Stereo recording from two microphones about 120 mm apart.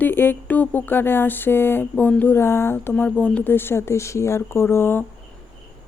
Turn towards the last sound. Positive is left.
turn(degrees=20)  # may be behind; listen again after turning